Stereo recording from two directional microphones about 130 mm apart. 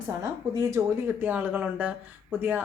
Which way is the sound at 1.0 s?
15° right (ahead or behind).